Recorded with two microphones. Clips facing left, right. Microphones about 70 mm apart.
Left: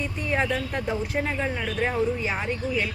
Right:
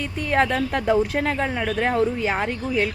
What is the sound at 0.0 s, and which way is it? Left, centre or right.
Speech, right.